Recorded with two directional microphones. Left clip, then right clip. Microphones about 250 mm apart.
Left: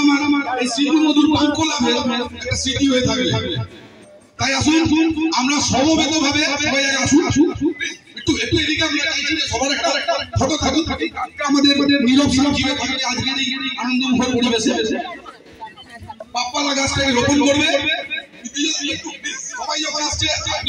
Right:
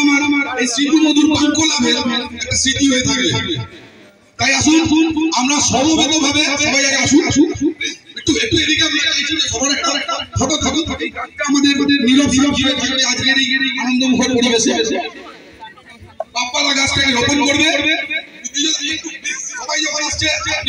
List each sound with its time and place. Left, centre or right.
0.0 s a sound: right
4.4 s speech: right
16.5 s speech: right